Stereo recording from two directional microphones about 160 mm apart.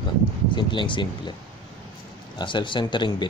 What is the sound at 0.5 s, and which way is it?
Speech, 30° left (ahead or behind).